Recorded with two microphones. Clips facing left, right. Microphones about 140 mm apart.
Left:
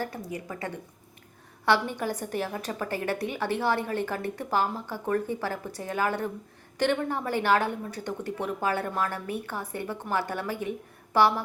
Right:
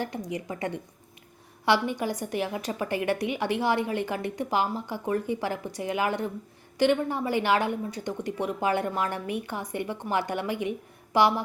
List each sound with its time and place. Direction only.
0.0 s a woman's voice: 20° right (ahead or behind)